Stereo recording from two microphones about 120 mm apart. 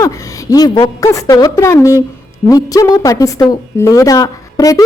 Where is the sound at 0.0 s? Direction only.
25° left (ahead or behind).